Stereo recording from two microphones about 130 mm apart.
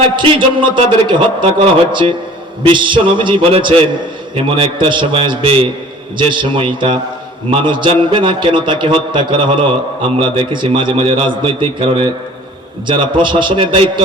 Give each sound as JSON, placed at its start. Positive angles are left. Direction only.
{"t": 0.2, "sound": "a man's voice", "side_deg": -40}